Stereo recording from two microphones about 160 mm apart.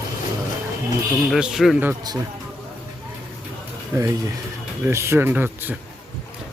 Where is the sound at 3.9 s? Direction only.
15° right (ahead or behind).